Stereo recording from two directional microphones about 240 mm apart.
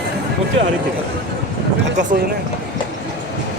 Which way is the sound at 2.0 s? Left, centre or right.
Right.